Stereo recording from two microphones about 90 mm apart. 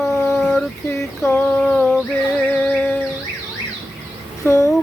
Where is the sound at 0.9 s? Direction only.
25° left (ahead or behind).